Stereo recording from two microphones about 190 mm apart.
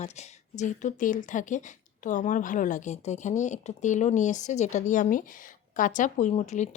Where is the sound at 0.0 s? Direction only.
35° left (ahead or behind).